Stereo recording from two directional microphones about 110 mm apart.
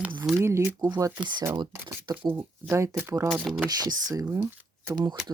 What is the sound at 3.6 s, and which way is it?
Speech, 35° right (ahead or behind).